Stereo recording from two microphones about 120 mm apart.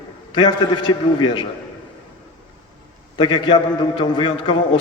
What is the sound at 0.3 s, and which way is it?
A man's voice, 40° left (ahead or behind).